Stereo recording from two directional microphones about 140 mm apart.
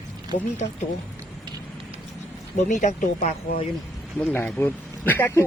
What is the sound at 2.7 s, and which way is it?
Speech, 60° left (ahead or behind).